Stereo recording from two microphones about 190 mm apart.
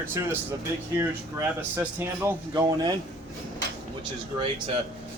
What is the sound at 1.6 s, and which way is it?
Speech, 10° right (ahead or behind).